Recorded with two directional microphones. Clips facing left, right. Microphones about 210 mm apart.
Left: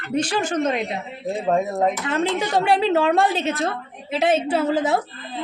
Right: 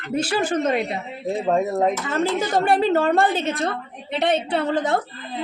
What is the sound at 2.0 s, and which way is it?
A woman's voice, centre (ahead or behind).